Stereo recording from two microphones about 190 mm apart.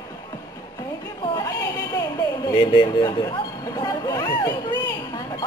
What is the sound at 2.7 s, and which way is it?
Speech, 25° left (ahead or behind).